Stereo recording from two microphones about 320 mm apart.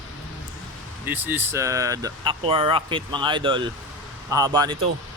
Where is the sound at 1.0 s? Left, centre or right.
Centre.